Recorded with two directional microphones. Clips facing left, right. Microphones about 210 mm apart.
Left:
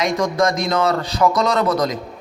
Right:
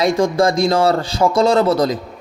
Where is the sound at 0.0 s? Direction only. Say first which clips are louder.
Right 4 dB; 30° right (ahead or behind).